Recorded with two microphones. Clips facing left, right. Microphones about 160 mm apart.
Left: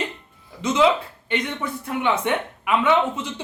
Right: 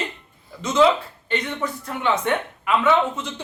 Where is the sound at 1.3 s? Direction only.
10° left (ahead or behind).